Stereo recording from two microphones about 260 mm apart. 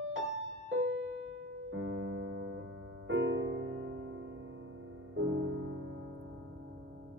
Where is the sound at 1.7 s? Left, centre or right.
Right.